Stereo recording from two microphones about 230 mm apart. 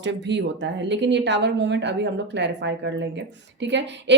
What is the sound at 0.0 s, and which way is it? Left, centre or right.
Speech, right.